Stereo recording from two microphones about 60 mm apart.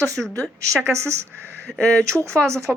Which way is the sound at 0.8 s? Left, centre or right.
Right.